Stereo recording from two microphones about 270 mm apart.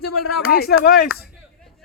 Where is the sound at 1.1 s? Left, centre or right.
Centre.